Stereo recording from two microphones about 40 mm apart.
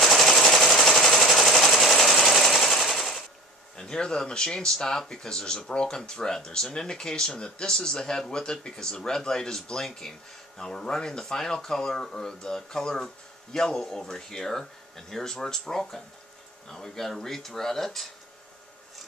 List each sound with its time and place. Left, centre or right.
0.0 s sewing machine: centre
3.7 s speech: centre